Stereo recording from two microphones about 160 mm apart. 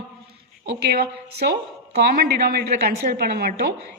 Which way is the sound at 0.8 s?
85° right.